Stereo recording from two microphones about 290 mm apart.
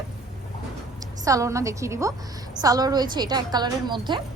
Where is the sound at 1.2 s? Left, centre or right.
Centre.